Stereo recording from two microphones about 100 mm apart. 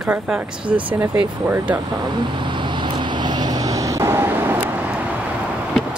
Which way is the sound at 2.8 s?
50° right (ahead or behind).